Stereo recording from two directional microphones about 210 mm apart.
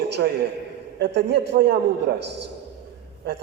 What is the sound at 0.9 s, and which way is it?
A man's voice, 50° right (ahead or behind).